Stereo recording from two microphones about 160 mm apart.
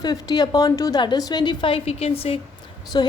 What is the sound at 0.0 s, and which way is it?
A woman's voice, 25° left (ahead or behind).